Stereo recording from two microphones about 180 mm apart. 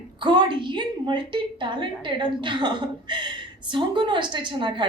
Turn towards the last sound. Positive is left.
turn(degrees=-25)  # may be behind; listen again after turning